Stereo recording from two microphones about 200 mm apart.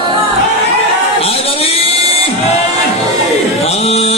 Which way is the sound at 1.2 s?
30° left (ahead or behind).